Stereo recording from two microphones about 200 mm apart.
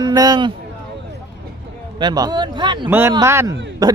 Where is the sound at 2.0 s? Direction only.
20° right (ahead or behind).